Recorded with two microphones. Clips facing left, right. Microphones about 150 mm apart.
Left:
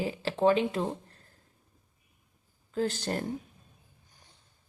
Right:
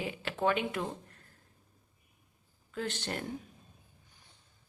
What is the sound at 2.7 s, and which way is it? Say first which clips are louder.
Speech: left 6 dB; 35° left (ahead or behind).